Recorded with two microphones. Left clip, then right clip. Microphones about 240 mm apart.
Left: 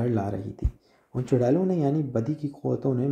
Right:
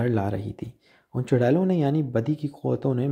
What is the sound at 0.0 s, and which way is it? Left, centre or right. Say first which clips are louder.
Speech: right 2 dB; right.